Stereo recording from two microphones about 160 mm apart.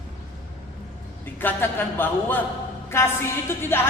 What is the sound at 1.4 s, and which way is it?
Speech, 15° left (ahead or behind).